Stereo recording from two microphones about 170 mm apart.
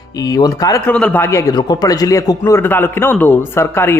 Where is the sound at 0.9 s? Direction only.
5° left (ahead or behind).